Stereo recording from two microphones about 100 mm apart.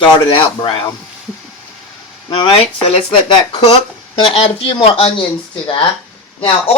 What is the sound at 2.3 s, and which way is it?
Speech, 55° left (ahead or behind).